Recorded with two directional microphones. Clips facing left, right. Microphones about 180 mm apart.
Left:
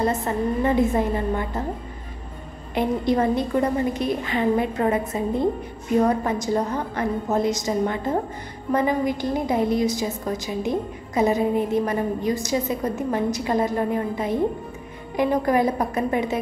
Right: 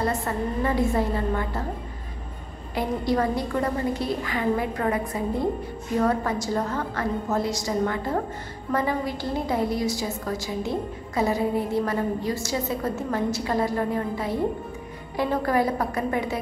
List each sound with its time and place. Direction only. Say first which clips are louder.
0.0 s a woman's voice: left 3 dB; 20° left (ahead or behind)
2.7 s a woman's voice: left 3 dB; 20° left (ahead or behind)